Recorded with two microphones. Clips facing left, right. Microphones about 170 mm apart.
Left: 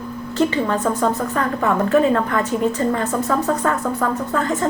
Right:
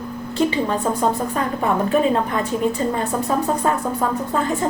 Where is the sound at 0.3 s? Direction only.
15° right (ahead or behind).